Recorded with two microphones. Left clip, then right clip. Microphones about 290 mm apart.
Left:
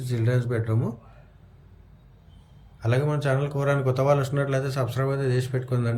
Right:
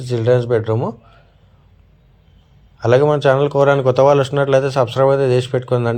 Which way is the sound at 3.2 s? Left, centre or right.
Centre.